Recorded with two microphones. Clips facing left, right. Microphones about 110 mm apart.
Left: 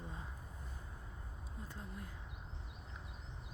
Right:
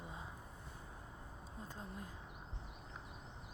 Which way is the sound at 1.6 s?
25° right (ahead or behind).